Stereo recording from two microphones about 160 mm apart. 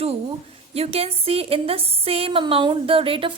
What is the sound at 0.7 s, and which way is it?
A woman's voice, 40° right (ahead or behind).